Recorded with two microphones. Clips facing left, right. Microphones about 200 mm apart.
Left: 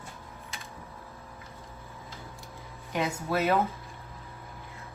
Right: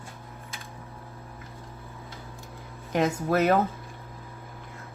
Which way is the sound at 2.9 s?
45° right (ahead or behind).